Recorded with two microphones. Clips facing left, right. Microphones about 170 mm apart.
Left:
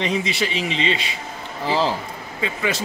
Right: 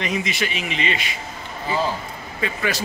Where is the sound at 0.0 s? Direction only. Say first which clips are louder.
Left 2 dB; 30° left (ahead or behind).